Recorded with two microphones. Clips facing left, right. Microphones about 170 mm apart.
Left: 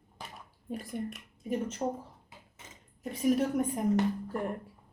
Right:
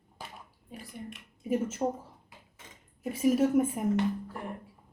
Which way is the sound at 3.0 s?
5° right (ahead or behind).